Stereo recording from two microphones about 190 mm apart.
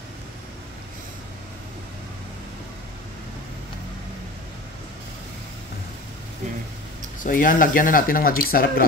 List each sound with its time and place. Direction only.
7.2 s speech: 45° left (ahead or behind)